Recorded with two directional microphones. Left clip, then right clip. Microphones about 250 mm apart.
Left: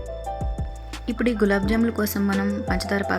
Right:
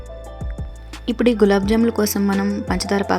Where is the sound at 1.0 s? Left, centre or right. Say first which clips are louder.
Right 6 dB; centre.